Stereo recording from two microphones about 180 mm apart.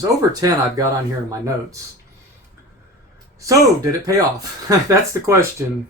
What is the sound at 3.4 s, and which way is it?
Speech, 20° right (ahead or behind).